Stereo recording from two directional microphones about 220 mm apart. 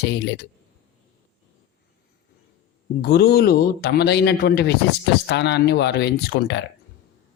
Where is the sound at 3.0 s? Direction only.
45° left (ahead or behind).